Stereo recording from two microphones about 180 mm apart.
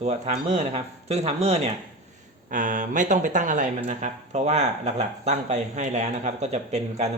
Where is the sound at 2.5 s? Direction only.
45° right (ahead or behind).